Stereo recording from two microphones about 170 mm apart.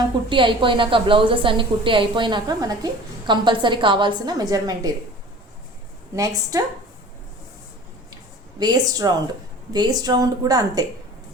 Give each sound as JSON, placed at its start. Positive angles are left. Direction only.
{"t": 0.3, "sound": "a woman's voice", "side_deg": -30}
{"t": 6.1, "sound": "a woman's voice", "side_deg": -20}
{"t": 8.1, "sound": "a woman's voice", "side_deg": -25}